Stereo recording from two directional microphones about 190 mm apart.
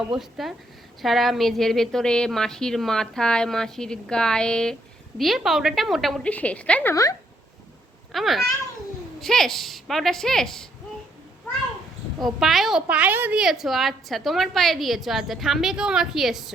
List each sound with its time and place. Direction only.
0.2 s a woman's voice: centre (ahead or behind)
6.9 s speech: 20° left (ahead or behind)
8.1 s a woman's voice: centre (ahead or behind)
12.2 s a woman's voice: centre (ahead or behind)